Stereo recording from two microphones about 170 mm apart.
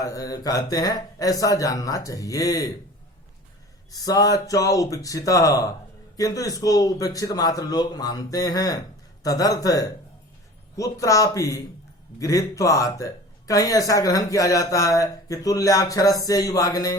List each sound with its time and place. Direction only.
0.0 s speech: 20° left (ahead or behind)
3.9 s speech: 20° left (ahead or behind)